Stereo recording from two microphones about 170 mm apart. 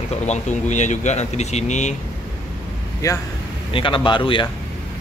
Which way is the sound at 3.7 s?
30° left (ahead or behind).